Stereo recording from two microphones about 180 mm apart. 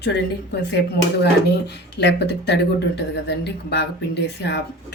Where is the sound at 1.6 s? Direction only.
70° left (ahead or behind).